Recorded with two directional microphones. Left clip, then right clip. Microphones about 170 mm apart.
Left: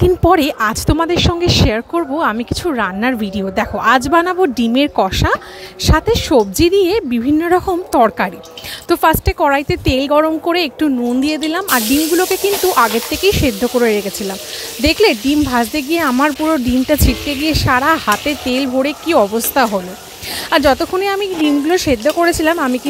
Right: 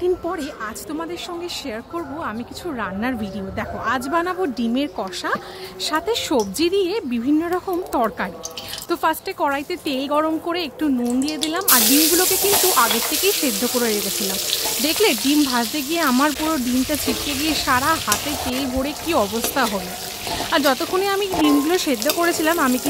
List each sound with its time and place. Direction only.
0.0 s speech: 60° left (ahead or behind); by 22.8 s 25° left (ahead or behind)